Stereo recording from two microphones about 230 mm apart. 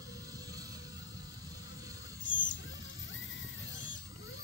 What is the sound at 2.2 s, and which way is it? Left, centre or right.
Music, left.